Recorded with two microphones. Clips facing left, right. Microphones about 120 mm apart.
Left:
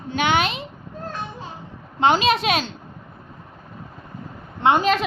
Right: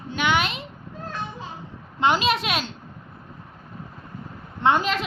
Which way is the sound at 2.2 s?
25° left (ahead or behind).